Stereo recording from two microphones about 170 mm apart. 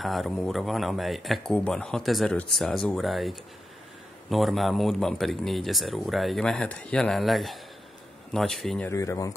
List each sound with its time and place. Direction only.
0.0 s speech: centre (ahead or behind)
8.8 s speech: 15° left (ahead or behind)